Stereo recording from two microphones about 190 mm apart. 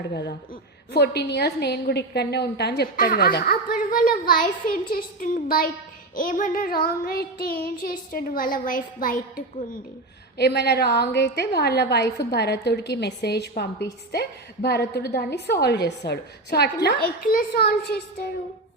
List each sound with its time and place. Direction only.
0.1 s a woman's voice: 60° left (ahead or behind)
10.3 s a woman's voice: 60° left (ahead or behind)